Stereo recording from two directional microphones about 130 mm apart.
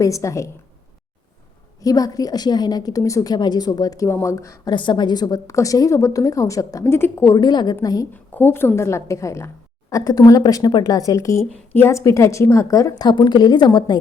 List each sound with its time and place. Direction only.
0.0 s a woman's voice: 25° left (ahead or behind)
1.8 s a woman's voice: 30° left (ahead or behind)
4.7 s a woman's voice: 35° left (ahead or behind)
8.1 s a woman's voice: 15° left (ahead or behind); by 14.0 s 35° left (ahead or behind)